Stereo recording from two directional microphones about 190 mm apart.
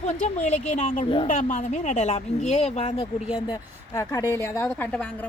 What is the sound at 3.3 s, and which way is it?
Speech, 5° right (ahead or behind).